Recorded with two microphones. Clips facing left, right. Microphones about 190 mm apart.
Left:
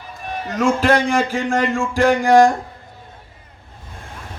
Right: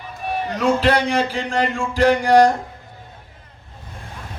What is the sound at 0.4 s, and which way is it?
A man's voice, 45° left (ahead or behind).